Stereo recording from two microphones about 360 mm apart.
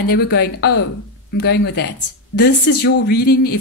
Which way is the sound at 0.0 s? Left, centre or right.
Left.